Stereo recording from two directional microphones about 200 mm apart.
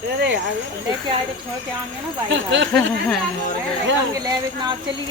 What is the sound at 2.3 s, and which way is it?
Speech, 65° right (ahead or behind).